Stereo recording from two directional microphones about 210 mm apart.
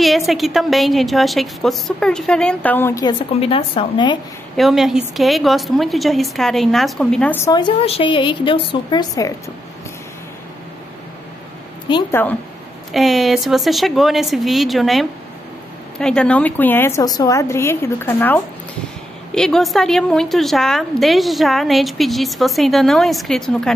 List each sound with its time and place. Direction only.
0.3 s a woman's voice: centre (ahead or behind); by 3.2 s 15° left (ahead or behind)
3.3 s speech: 25° left (ahead or behind)
4.6 s a woman's voice: centre (ahead or behind); by 9.3 s 20° left (ahead or behind)
11.9 s a woman's voice: 10° left (ahead or behind)
12.9 s a woman's voice: centre (ahead or behind)